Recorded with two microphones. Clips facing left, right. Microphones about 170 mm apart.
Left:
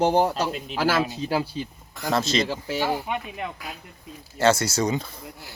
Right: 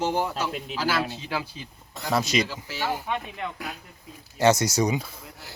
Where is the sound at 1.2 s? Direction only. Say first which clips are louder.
Left 6 dB; 35° left (ahead or behind).